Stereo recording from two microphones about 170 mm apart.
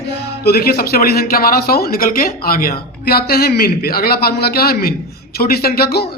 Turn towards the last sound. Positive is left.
turn(degrees=70)  # may be behind; listen again after turning